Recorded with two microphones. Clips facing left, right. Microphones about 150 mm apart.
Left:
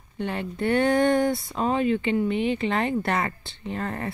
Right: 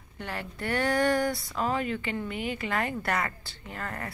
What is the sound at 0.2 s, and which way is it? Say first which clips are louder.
Speech: left 8 dB; 20° left (ahead or behind).